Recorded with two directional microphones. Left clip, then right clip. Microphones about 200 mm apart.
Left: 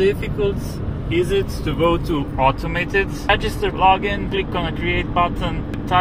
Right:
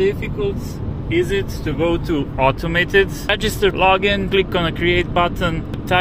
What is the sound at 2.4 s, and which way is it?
Speech, 40° right (ahead or behind).